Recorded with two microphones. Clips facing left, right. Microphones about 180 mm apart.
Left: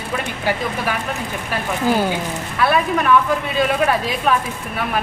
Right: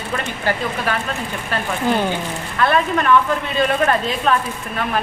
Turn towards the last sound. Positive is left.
turn(degrees=10)  # may be behind; listen again after turning